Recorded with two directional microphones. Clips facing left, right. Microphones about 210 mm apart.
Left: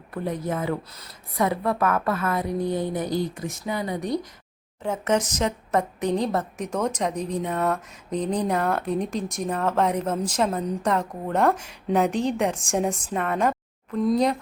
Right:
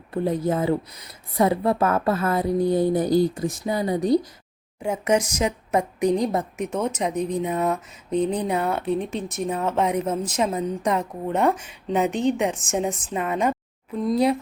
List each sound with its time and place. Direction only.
0.1 s a woman's voice: 30° right (ahead or behind)
4.8 s a woman's voice: 10° right (ahead or behind)